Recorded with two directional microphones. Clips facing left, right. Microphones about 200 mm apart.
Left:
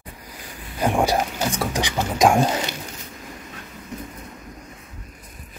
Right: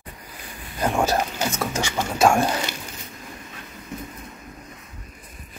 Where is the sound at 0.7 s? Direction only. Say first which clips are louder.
Left 2 dB; 15° left (ahead or behind).